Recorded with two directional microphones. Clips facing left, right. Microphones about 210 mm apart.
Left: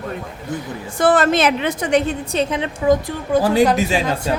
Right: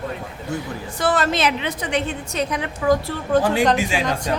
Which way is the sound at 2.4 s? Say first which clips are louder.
Left 2 dB; 25° left (ahead or behind).